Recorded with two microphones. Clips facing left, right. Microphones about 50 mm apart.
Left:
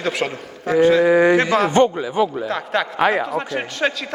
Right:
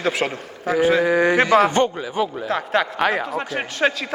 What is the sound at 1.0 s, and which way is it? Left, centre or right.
Speech, centre.